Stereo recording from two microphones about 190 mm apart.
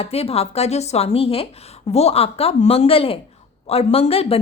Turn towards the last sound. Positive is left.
turn(degrees=30)  # may be behind; listen again after turning